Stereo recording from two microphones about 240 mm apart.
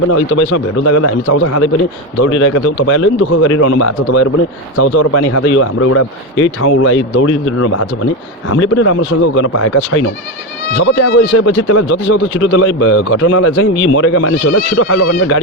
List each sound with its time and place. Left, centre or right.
0.3 s speech: left
2.2 s speech: left
8.4 s speech: left
10.8 s speech: left
11.3 s speech: left